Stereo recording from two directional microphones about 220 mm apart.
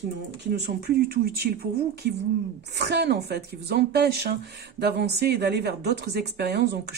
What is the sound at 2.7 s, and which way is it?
A woman's voice, 50° right (ahead or behind).